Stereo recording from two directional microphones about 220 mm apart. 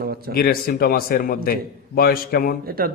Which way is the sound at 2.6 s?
40° right (ahead or behind).